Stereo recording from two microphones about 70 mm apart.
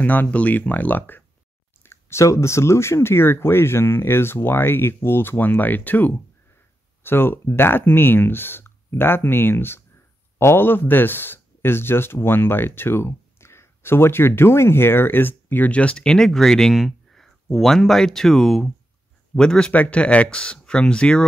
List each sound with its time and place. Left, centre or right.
0.0 s speech: left